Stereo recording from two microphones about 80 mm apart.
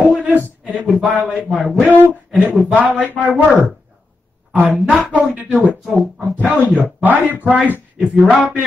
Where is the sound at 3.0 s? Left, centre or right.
Right.